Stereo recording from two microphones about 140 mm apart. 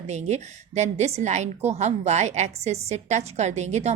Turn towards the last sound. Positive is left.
turn(degrees=-55)  # may be behind; listen again after turning